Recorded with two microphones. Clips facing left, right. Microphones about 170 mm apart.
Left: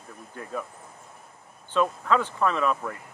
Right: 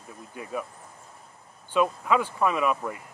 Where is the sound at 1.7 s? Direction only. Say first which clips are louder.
Even; 10° right (ahead or behind).